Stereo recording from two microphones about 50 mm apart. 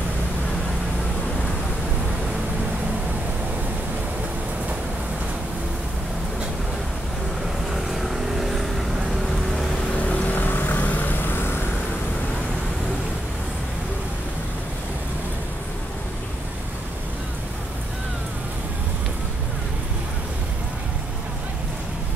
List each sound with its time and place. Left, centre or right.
7.7 s vehicle: centre
10.0 s vehicle: left